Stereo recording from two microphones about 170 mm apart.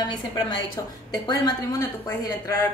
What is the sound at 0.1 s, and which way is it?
A woman's voice, 25° left (ahead or behind).